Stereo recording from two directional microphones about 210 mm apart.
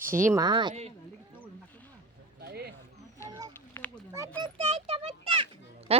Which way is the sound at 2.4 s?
50° right (ahead or behind).